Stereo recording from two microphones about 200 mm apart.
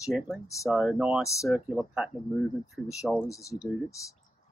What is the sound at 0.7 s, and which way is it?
Speech, 5° right (ahead or behind).